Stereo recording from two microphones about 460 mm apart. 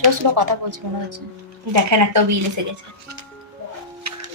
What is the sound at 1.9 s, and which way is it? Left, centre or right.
Speech, right.